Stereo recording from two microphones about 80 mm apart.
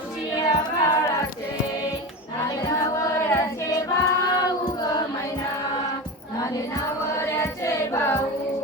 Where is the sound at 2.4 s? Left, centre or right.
Left.